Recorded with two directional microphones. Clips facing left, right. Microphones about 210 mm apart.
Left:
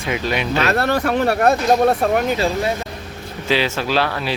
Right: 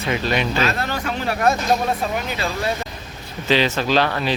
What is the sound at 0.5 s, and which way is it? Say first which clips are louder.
Speech: left 5 dB; 60° left (ahead or behind).